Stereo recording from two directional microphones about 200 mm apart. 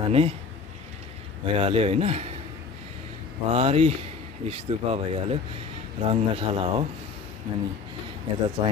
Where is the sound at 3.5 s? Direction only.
30° right (ahead or behind).